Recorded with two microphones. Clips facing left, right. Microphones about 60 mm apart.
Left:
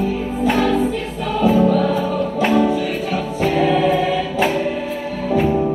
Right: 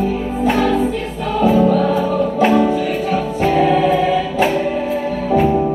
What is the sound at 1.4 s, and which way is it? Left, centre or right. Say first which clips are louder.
Music: right 2 dB; right.